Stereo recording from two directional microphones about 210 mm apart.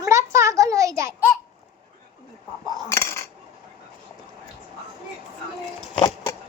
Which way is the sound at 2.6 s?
15° left (ahead or behind).